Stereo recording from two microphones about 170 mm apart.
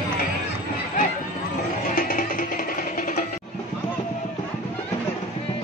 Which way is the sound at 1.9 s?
50° left (ahead or behind).